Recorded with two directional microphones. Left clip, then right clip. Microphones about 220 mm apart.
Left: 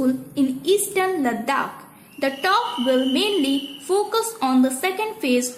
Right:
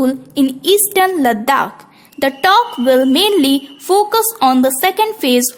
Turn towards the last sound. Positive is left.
turn(degrees=-50)  # may be behind; listen again after turning